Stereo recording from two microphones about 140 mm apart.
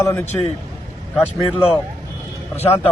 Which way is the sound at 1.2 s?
5° right (ahead or behind).